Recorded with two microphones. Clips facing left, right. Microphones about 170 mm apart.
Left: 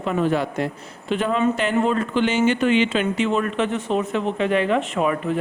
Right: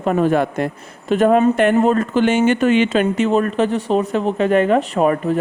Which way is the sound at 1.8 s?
45° right (ahead or behind).